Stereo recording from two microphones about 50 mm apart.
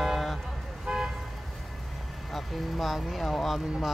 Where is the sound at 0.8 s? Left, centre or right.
Centre.